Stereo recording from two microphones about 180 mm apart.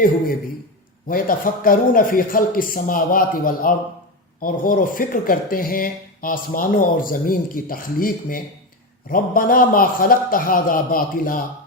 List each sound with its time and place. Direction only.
1.0 s speech: 50° left (ahead or behind)